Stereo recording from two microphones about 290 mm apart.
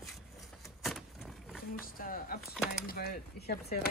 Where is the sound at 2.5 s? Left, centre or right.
Centre.